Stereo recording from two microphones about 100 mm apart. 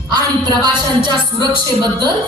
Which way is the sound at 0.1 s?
45° right (ahead or behind).